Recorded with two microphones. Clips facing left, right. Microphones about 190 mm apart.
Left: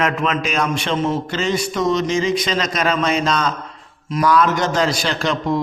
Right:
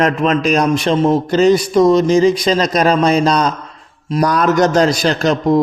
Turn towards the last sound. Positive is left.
turn(degrees=-40)  # may be behind; listen again after turning